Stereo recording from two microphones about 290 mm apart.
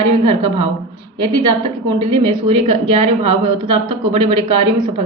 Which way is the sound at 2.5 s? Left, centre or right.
Right.